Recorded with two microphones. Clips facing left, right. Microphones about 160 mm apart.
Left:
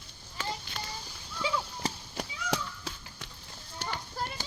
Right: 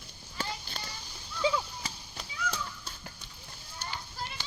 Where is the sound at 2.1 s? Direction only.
90° left.